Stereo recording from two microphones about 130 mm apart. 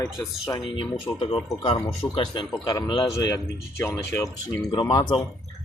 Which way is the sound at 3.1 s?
25° left (ahead or behind).